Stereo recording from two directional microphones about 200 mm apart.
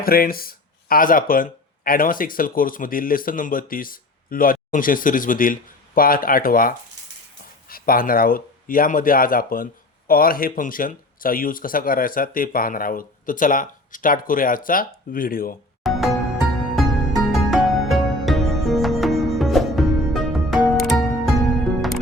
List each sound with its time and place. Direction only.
0.0 s speech: 50° left (ahead or behind)
15.8 s music: centre (ahead or behind)